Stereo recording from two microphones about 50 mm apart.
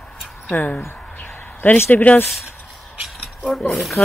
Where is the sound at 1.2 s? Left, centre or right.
Left.